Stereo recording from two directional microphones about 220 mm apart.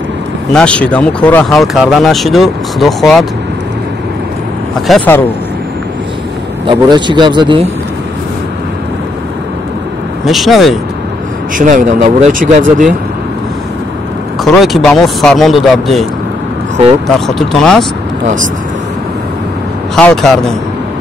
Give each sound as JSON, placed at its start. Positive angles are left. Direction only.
{"t": 0.5, "sound": "speech", "side_deg": 5}
{"t": 4.8, "sound": "speech", "side_deg": 5}
{"t": 6.7, "sound": "speech", "side_deg": -20}
{"t": 10.2, "sound": "speech", "side_deg": 0}
{"t": 11.5, "sound": "speech", "side_deg": -35}
{"t": 14.4, "sound": "speech", "side_deg": 0}
{"t": 17.4, "sound": "speech", "side_deg": 0}
{"t": 18.2, "sound": "speech", "side_deg": -35}
{"t": 20.0, "sound": "speech", "side_deg": 5}